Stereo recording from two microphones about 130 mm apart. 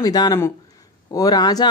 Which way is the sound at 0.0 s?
30° left (ahead or behind).